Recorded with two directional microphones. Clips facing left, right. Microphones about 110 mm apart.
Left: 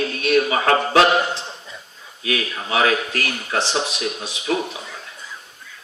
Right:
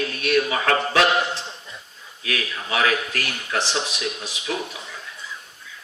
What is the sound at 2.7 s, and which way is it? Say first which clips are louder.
Speech: left 3 dB; 30° left (ahead or behind).